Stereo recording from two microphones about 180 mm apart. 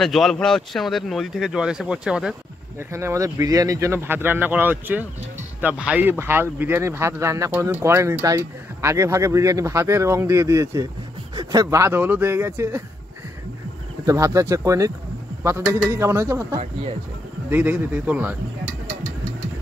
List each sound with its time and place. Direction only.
0.0 s speech: centre (ahead or behind)
2.9 s speech: 15° right (ahead or behind)
14.0 s speech: 15° right (ahead or behind)